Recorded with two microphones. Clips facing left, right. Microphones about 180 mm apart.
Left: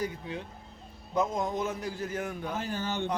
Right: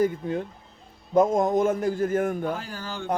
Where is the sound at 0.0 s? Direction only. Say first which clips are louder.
Right 10 dB; 50° right (ahead or behind).